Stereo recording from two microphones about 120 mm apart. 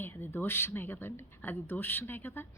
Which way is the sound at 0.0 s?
20° left (ahead or behind).